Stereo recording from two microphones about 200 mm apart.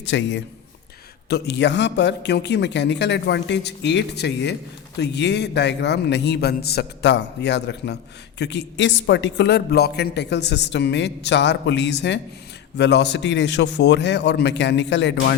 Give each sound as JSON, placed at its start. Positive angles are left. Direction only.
{"t": 0.0, "sound": "speech", "side_deg": 60}